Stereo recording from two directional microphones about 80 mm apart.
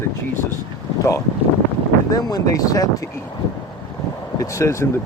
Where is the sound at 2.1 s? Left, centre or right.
Left.